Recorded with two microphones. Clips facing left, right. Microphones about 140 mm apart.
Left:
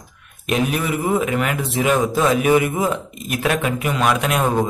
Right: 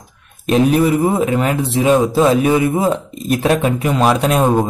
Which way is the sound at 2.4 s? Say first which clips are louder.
Right 2 dB; 15° left (ahead or behind).